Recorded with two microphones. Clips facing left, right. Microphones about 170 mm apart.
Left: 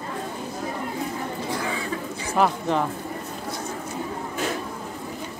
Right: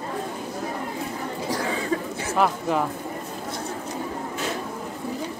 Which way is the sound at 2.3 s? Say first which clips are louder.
Left 1 dB; centre (ahead or behind).